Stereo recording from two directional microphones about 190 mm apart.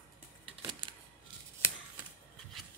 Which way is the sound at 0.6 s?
25° right (ahead or behind).